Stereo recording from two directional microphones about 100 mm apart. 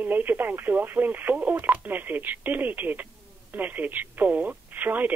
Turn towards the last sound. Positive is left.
turn(degrees=-20)  # may be behind; listen again after turning